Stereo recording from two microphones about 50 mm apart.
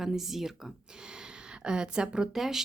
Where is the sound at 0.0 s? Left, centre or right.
Centre.